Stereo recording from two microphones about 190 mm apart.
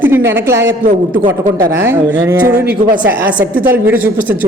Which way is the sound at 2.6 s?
45° right (ahead or behind).